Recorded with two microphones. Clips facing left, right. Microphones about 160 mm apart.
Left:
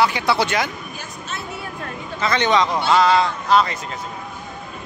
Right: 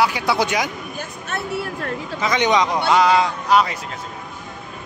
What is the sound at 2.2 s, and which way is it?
Speech, 15° right (ahead or behind).